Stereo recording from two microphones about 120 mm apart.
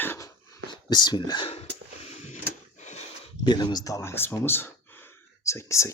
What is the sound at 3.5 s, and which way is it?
Speech, 35° left (ahead or behind).